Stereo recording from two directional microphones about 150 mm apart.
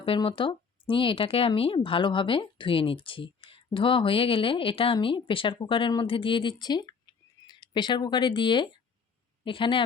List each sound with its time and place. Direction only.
0.0 s a woman's voice: 35° left (ahead or behind)